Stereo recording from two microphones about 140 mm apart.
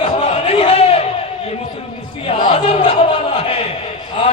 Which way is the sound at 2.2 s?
40° left (ahead or behind).